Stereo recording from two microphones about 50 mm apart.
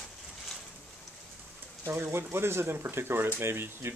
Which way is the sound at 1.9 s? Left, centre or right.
Right.